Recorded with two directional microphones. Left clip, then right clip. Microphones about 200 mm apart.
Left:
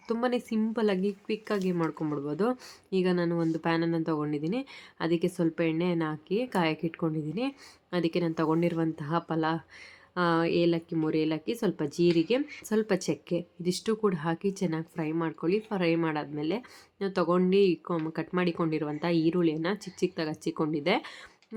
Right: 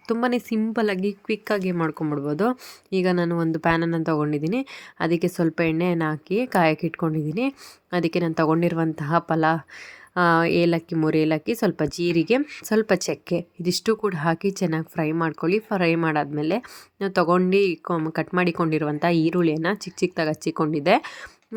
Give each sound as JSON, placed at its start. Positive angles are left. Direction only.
{"t": 0.1, "sound": "speech", "side_deg": -30}